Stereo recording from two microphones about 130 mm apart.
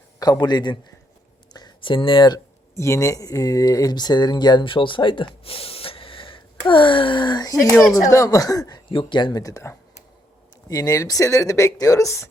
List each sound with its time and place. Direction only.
0.2 s speech: 30° left (ahead or behind)
8.1 s speech: 25° left (ahead or behind)
8.9 s speech: 40° left (ahead or behind); by 12.3 s 25° left (ahead or behind)